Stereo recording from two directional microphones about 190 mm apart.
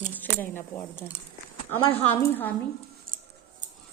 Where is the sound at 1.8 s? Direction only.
30° left (ahead or behind).